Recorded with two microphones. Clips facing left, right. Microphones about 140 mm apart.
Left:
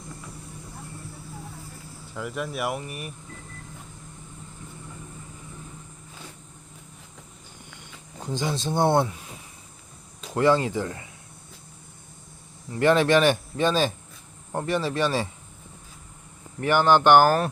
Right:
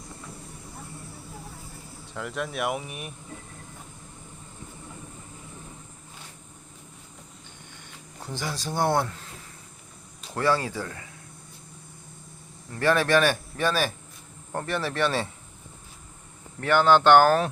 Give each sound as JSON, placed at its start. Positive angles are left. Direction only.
{"t": 2.1, "sound": "speech", "side_deg": 0}
{"t": 8.2, "sound": "speech", "side_deg": 20}
{"t": 10.3, "sound": "speech", "side_deg": 20}
{"t": 12.7, "sound": "speech", "side_deg": 20}
{"t": 16.6, "sound": "speech", "side_deg": 15}